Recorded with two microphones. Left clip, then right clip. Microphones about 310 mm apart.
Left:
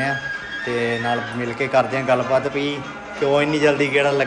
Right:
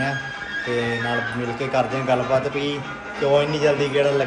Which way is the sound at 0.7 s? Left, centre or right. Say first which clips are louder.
Left 2 dB; centre.